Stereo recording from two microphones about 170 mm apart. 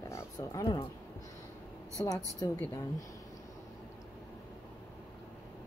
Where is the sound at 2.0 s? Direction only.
15° left (ahead or behind).